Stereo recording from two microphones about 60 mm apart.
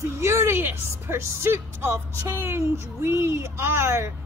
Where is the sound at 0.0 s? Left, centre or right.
Right.